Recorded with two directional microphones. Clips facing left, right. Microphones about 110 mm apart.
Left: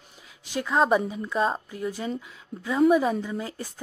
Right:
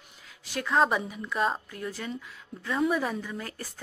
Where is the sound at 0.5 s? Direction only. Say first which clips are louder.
Left 3 dB; 20° left (ahead or behind).